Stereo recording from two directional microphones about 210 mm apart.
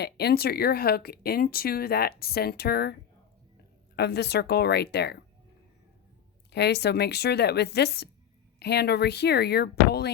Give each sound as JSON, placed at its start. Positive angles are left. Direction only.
{"t": 0.0, "sound": "speech", "side_deg": 50}
{"t": 3.9, "sound": "speech", "side_deg": 50}
{"t": 6.5, "sound": "speech", "side_deg": 55}